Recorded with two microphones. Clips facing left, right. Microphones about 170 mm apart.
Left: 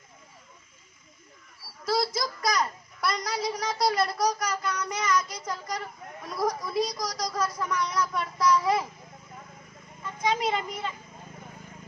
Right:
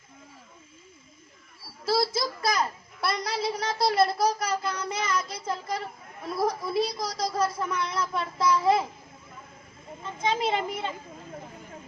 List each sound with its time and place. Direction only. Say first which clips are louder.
1.8 s a child's voice: right 2 dB; 30° right (ahead or behind)
10.0 s speech: even; 25° right (ahead or behind)